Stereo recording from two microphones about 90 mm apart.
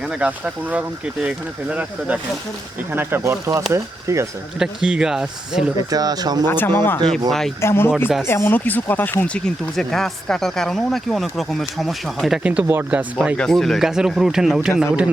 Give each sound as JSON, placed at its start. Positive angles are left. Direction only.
{"t": 0.2, "sound": "speech", "side_deg": -15}
{"t": 2.9, "sound": "speech", "side_deg": -25}
{"t": 4.6, "sound": "speech", "side_deg": -5}
{"t": 5.9, "sound": "speech", "side_deg": -45}
{"t": 6.5, "sound": "speech", "side_deg": 25}
{"t": 7.3, "sound": "speech", "side_deg": 5}
{"t": 7.6, "sound": "speech", "side_deg": 30}
{"t": 12.4, "sound": "speech", "side_deg": -15}
{"t": 13.3, "sound": "speech", "side_deg": 5}